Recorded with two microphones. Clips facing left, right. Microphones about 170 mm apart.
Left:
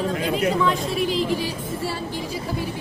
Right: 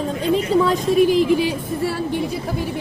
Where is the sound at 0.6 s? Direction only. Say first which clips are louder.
Right 6 dB; 35° right (ahead or behind).